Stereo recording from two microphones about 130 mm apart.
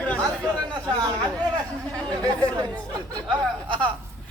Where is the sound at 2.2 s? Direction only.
30° right (ahead or behind).